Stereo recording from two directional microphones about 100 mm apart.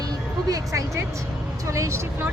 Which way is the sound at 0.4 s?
35° right (ahead or behind).